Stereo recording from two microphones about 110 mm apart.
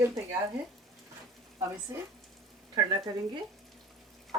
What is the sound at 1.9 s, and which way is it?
Speech, 25° right (ahead or behind).